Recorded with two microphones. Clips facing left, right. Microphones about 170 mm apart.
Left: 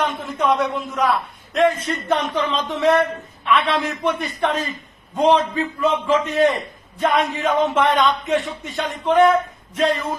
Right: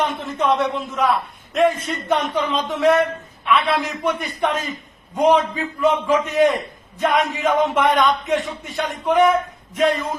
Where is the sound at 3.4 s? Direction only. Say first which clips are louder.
Even; centre (ahead or behind).